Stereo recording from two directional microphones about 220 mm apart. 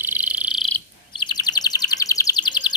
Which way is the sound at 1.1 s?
20° left (ahead or behind).